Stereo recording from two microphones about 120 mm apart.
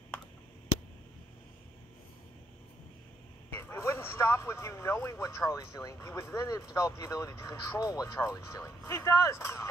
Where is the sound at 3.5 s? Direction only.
20° left (ahead or behind).